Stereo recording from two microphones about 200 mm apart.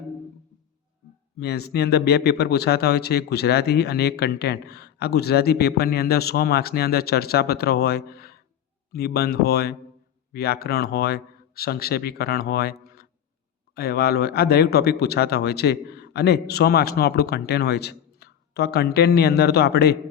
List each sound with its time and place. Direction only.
1.4 s speech: 55° left (ahead or behind)